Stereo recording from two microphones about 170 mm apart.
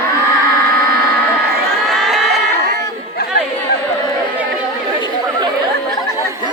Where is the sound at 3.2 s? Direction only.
70° left (ahead or behind).